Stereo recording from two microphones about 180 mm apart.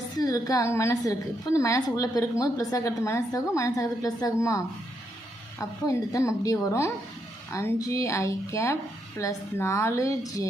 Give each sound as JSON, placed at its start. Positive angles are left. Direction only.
{"t": 0.2, "sound": "a woman's voice", "side_deg": 20}